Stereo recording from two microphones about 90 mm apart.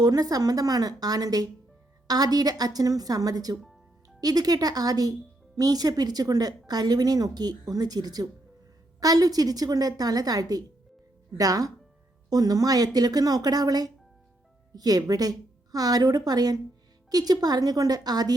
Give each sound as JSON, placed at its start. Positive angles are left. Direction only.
{"t": 0.0, "sound": "a woman's voice", "side_deg": -45}